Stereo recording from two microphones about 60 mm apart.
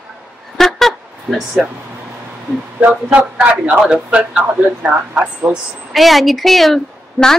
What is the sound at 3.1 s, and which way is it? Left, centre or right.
A man's voice, right.